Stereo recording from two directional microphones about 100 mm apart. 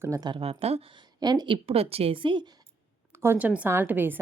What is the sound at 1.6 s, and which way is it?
Speech, 80° right.